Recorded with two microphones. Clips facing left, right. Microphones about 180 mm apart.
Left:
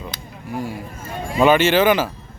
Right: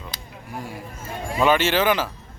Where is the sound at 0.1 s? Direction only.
35° right (ahead or behind).